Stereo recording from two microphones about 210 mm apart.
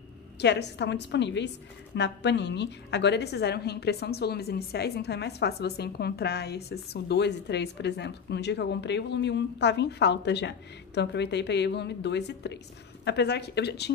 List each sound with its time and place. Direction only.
0.4 s a woman's voice: 55° left (ahead or behind)